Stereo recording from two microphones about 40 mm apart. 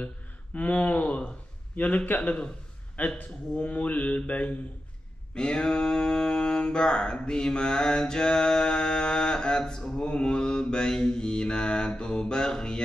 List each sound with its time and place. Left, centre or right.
0.6 s mantra: left
3.0 s a man's voice: left
3.5 s mantra: left
5.3 s mantra: left